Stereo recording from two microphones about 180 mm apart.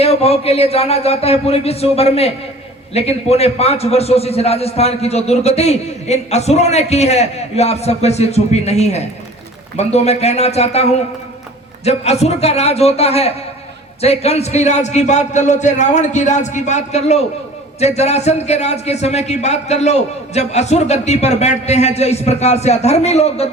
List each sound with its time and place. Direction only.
0.0 s a man's voice: 35° left (ahead or behind)